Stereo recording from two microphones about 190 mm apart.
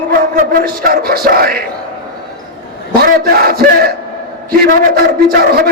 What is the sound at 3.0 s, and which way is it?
A man's voice, 50° right (ahead or behind).